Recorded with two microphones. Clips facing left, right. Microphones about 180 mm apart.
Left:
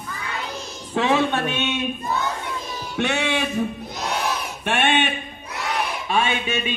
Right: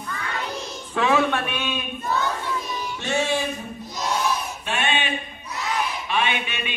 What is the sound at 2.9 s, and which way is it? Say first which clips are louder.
Music: left 2 dB; 65° left (ahead or behind).